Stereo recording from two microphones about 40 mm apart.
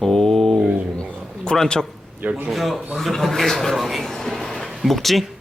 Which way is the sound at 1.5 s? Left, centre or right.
Centre.